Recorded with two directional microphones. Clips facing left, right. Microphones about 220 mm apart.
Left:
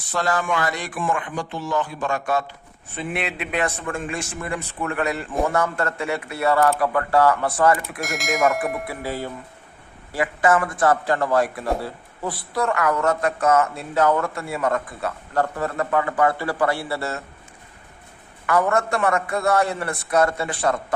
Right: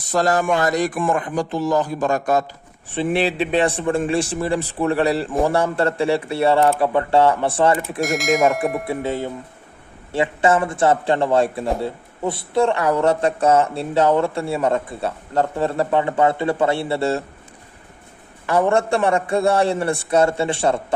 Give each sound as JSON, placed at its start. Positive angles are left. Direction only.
{"t": 0.1, "sound": "a man's voice", "side_deg": -40}
{"t": 8.0, "sound": "speech", "side_deg": 0}
{"t": 8.9, "sound": "a man's voice", "side_deg": -20}
{"t": 18.4, "sound": "a man's voice", "side_deg": -30}